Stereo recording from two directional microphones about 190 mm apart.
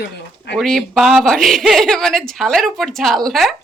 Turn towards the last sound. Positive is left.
turn(degrees=0)  # may be behind; listen again after turning